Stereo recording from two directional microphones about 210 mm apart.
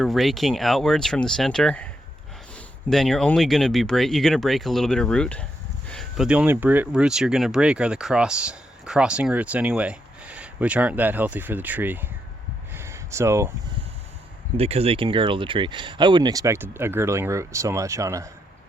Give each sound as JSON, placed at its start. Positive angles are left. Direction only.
{"t": 0.0, "sound": "speech", "side_deg": 0}
{"t": 12.7, "sound": "a sound", "side_deg": -15}
{"t": 14.5, "sound": "speech", "side_deg": -30}